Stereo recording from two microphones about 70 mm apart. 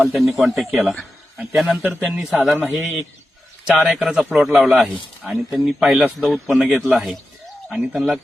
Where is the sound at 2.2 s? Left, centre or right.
Centre.